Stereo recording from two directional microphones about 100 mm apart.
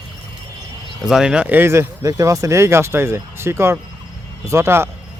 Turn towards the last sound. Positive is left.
turn(degrees=-25)  # may be behind; listen again after turning